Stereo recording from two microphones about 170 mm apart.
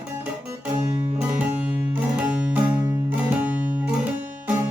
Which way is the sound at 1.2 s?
10° right (ahead or behind).